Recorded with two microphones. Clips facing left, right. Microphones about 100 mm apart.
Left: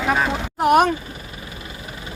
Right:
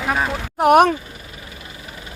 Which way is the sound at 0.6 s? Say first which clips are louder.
Right 3 dB; 60° right (ahead or behind).